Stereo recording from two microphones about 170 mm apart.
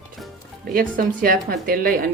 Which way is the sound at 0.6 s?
60° right (ahead or behind).